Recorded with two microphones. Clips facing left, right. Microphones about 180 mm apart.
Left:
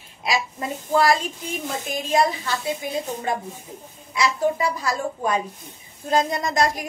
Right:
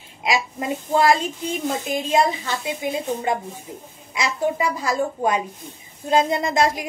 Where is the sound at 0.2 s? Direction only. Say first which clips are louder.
Right 2 dB; 20° right (ahead or behind).